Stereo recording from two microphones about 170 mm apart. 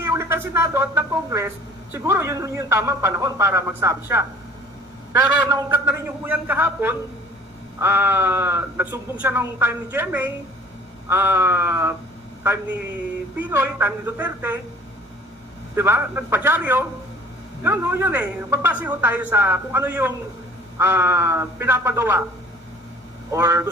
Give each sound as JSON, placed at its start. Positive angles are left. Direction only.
{"t": 0.0, "sound": "a woman's voice", "side_deg": -15}
{"t": 5.5, "sound": "a woman's voice", "side_deg": -20}
{"t": 13.4, "sound": "a woman's voice", "side_deg": -10}
{"t": 15.7, "sound": "a woman's voice", "side_deg": -15}
{"t": 23.3, "sound": "a woman's voice", "side_deg": -20}